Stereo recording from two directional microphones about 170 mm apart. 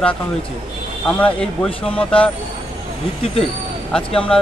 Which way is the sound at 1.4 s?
5° left (ahead or behind).